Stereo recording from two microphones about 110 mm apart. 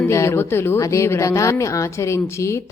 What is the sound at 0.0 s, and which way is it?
Speech, 25° left (ahead or behind).